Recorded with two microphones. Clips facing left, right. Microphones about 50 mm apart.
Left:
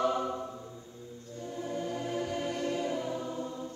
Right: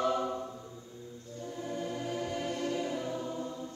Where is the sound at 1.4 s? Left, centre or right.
Centre.